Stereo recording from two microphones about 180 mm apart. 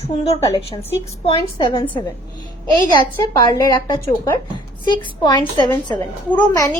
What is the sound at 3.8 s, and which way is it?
A woman's voice, 25° left (ahead or behind).